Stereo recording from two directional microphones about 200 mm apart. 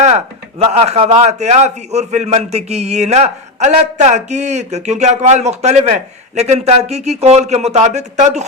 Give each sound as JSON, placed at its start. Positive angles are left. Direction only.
{"t": 0.6, "sound": "a man's voice", "side_deg": -30}